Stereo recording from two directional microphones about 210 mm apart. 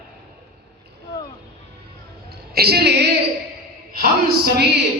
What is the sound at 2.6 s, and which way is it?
Speech, 50° right (ahead or behind).